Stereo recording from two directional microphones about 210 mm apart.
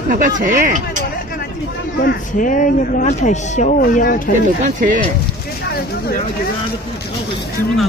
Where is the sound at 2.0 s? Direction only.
45° left (ahead or behind).